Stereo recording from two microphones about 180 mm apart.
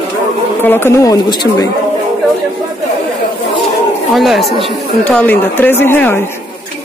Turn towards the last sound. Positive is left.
turn(degrees=10)  # may be behind; listen again after turning